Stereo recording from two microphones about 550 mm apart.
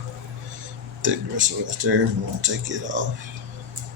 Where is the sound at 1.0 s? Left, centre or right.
Centre.